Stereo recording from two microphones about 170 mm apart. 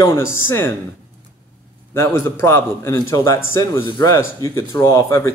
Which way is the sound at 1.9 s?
15° left (ahead or behind).